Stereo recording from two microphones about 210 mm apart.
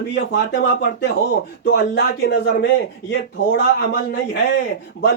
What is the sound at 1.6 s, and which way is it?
Speech, 55° left (ahead or behind).